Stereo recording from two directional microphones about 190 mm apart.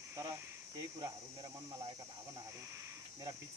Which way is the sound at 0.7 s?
20° right (ahead or behind).